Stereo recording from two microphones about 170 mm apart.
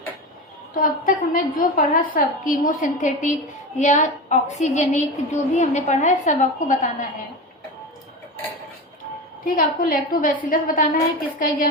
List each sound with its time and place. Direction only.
0.8 s a woman's voice: 55° left (ahead or behind)
9.5 s a woman's voice: 55° left (ahead or behind)